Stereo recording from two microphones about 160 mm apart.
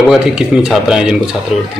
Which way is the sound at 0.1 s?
5° right (ahead or behind).